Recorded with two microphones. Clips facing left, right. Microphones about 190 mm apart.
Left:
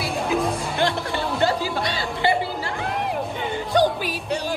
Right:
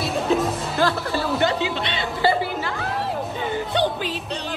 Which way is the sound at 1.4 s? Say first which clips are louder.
Even; 20° right (ahead or behind).